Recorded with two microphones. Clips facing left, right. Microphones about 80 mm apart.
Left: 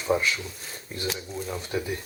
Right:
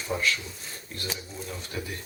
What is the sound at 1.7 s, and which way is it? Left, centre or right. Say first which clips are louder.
Speech: left 6 dB; centre.